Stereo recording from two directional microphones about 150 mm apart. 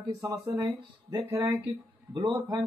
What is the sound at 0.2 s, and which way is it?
Speech, 25° right (ahead or behind).